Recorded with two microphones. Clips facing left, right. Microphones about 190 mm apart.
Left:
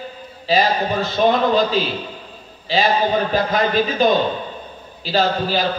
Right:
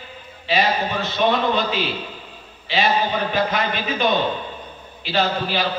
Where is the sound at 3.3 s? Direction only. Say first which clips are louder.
Left 4 dB; 35° left (ahead or behind).